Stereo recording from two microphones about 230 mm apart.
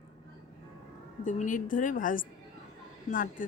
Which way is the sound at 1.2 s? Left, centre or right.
Left.